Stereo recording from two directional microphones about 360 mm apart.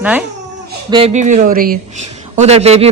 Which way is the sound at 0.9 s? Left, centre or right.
Centre.